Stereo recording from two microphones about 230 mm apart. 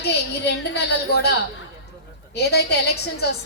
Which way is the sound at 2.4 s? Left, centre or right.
Left.